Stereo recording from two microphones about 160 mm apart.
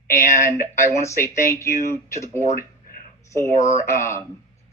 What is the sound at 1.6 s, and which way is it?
Speech, 15° left (ahead or behind).